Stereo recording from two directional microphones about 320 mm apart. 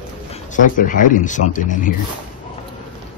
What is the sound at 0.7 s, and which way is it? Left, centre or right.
Speech, left.